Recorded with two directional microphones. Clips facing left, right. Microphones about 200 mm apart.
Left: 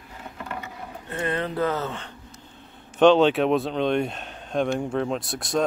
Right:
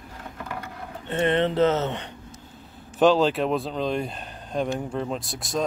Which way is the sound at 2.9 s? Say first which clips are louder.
Left 3 dB; centre (ahead or behind).